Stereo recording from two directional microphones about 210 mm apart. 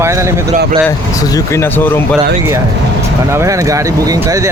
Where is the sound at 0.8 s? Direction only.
15° left (ahead or behind).